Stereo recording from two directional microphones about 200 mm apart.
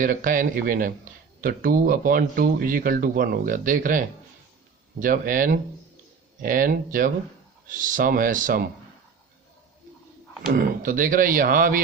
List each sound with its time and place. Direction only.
0.0 s speech: 45° right (ahead or behind)
10.5 s speech: 45° right (ahead or behind)